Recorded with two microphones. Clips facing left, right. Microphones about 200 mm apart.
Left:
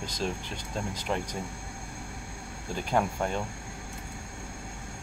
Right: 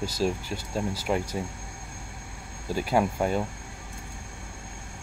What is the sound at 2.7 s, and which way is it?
Speech, 10° right (ahead or behind).